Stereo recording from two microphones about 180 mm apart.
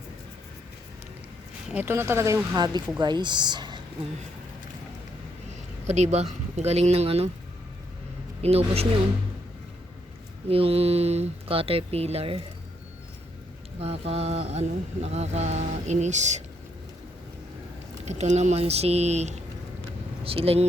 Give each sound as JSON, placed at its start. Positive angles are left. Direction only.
{"t": 1.7, "sound": "speech", "side_deg": -10}
{"t": 5.8, "sound": "speech", "side_deg": -40}
{"t": 8.4, "sound": "speech", "side_deg": -35}
{"t": 10.5, "sound": "speech", "side_deg": -35}
{"t": 13.8, "sound": "speech", "side_deg": -35}
{"t": 18.0, "sound": "speech", "side_deg": -40}